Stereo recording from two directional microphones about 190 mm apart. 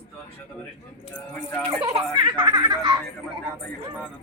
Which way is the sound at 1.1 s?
10° left (ahead or behind).